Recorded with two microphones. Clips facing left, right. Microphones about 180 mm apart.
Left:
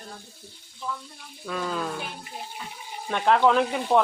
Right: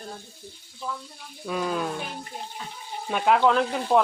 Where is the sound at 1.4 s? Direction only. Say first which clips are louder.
Right 2 dB; 15° right (ahead or behind).